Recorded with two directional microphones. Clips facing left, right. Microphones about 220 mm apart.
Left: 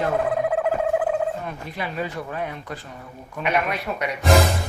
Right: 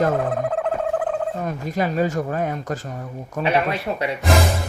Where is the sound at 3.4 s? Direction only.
30° right (ahead or behind).